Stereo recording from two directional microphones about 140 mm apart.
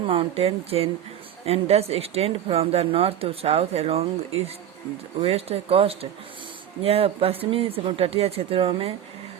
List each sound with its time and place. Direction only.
0.1 s speech: 45° right (ahead or behind)